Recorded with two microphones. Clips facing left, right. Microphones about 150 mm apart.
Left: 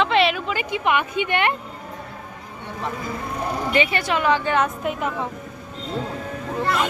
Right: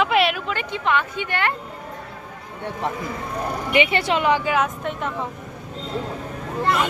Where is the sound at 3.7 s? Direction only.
20° right (ahead or behind).